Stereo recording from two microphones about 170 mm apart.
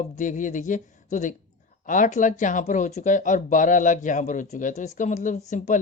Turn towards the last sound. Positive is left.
turn(degrees=45)  # may be behind; listen again after turning